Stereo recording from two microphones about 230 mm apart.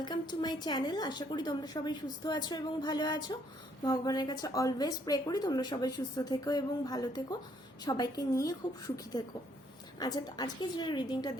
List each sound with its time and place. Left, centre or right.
0.0 s a woman's voice: centre
10.0 s a woman's voice: centre